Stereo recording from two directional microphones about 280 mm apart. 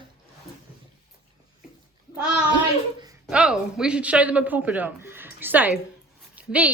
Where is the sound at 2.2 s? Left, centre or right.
Centre.